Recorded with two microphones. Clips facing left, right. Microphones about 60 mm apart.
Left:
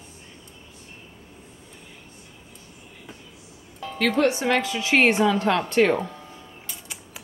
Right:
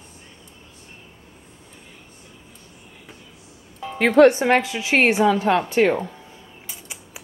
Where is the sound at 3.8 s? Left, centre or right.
Centre.